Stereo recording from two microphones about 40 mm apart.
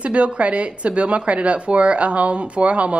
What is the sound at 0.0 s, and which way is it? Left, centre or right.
A woman's voice, right.